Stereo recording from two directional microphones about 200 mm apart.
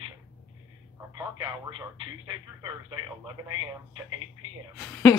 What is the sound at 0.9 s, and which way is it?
Speech, 20° right (ahead or behind).